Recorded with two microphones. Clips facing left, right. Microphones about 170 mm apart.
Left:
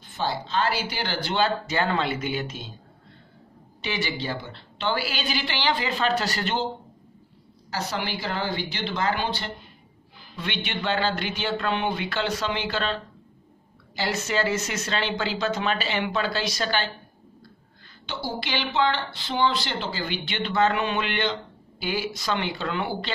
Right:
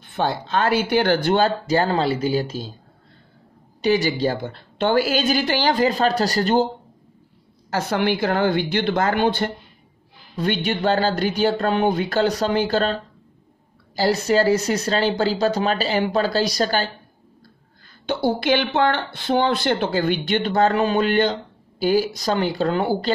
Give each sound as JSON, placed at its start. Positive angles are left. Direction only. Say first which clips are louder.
{"t": 0.0, "sound": "speech", "louder": "right 5 dB", "side_deg": -60}
{"t": 3.8, "sound": "speech", "louder": "right 11 dB", "side_deg": -40}
{"t": 7.7, "sound": "speech", "louder": "right 9 dB", "side_deg": -55}
{"t": 10.3, "sound": "speech", "louder": "right 9 dB", "side_deg": -40}
{"t": 18.0, "sound": "speech", "louder": "right 11 dB", "side_deg": -50}